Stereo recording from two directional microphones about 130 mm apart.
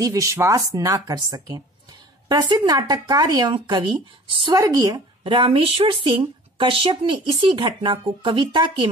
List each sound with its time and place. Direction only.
0.0 s a woman's voice: 25° right (ahead or behind)
4.6 s speech: 25° right (ahead or behind)
5.2 s a woman's voice: 40° right (ahead or behind)